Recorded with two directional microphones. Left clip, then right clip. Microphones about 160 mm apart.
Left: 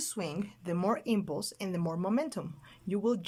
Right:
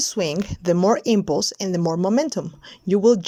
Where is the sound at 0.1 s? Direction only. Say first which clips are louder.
Right 14 dB; 45° right (ahead or behind).